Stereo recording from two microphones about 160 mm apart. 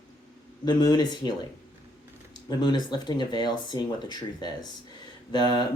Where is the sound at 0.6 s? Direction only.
25° left (ahead or behind).